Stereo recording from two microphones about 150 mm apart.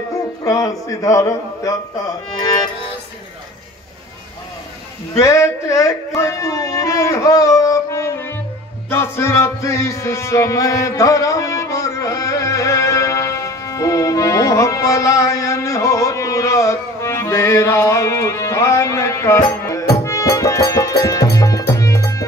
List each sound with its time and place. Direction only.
0.4 s music: 25° left (ahead or behind)
5.2 s music: 20° left (ahead or behind)